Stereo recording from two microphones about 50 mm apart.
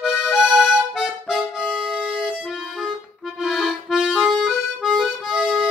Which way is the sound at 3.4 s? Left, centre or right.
Centre.